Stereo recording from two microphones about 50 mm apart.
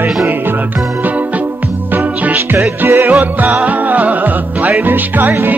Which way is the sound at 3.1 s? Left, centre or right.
Right.